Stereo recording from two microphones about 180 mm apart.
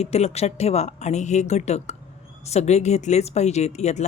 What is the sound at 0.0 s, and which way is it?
Speech, 35° left (ahead or behind).